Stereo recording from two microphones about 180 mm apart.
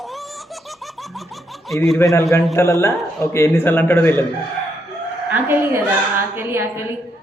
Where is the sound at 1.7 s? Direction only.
Centre (ahead or behind).